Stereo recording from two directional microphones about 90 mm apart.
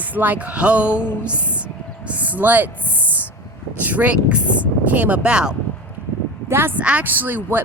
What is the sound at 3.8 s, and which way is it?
Speech, 20° right (ahead or behind).